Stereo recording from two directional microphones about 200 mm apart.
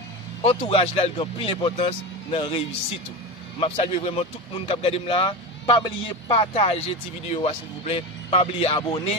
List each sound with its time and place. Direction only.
0.4 s speech: 30° left (ahead or behind)